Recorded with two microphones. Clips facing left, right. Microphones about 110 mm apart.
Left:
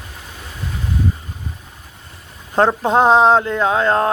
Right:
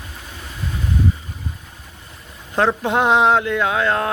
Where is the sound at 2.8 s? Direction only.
35° left (ahead or behind).